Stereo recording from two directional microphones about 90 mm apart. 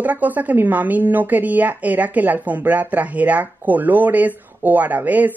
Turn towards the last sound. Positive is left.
turn(degrees=-20)  # may be behind; listen again after turning